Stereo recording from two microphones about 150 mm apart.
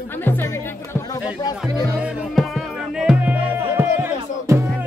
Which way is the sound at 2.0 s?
Centre (ahead or behind).